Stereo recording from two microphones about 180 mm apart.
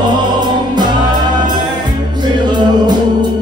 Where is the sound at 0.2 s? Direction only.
25° right (ahead or behind).